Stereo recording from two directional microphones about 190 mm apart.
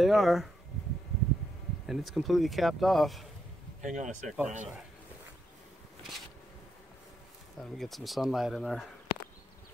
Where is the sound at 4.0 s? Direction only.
40° right (ahead or behind).